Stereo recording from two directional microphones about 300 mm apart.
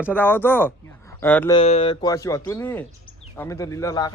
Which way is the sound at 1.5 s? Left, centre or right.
Centre.